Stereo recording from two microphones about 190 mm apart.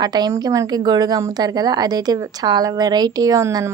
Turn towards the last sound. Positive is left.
turn(degrees=-15)  # may be behind; listen again after turning